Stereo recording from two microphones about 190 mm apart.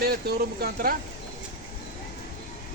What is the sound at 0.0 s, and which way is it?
Speech, 55° right (ahead or behind).